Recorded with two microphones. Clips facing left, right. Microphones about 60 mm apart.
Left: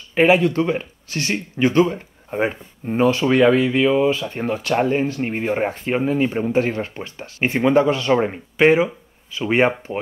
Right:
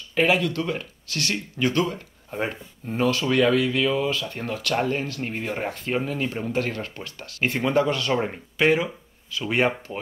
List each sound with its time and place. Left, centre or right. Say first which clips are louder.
0.1 s speech: left 6 dB; left